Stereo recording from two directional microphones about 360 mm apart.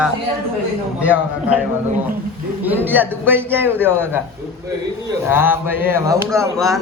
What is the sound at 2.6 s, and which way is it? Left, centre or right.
Speech, centre.